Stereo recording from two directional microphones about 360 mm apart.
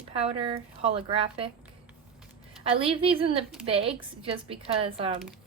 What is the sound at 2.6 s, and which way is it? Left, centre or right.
Speech, centre.